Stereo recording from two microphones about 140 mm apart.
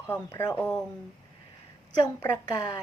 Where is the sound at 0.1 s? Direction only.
15° left (ahead or behind).